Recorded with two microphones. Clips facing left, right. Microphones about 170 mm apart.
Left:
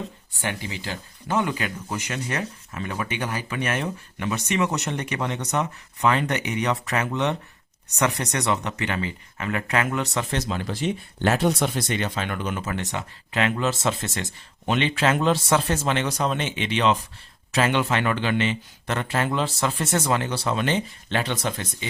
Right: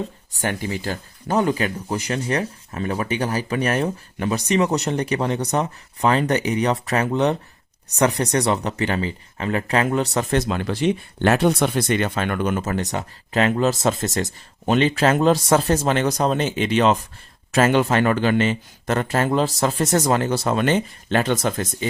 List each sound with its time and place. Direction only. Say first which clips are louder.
0.4 s speech: right 6 dB; 45° right (ahead or behind)
10.3 s speech: right 6 dB; 60° right (ahead or behind)